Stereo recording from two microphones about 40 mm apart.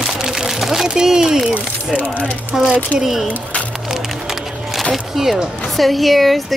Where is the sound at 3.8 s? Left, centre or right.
Centre.